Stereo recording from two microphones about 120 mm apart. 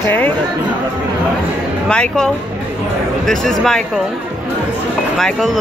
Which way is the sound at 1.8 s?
5° left (ahead or behind).